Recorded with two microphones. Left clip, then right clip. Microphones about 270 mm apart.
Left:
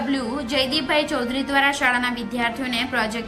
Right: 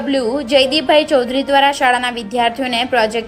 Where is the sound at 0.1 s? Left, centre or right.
Centre.